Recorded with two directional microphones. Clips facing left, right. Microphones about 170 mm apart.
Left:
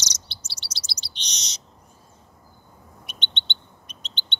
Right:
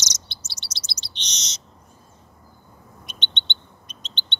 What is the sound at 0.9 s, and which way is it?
Bird, 10° left (ahead or behind).